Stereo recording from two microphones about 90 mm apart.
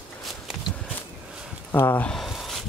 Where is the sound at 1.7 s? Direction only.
20° left (ahead or behind).